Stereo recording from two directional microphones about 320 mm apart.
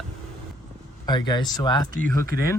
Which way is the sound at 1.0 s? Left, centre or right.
Centre.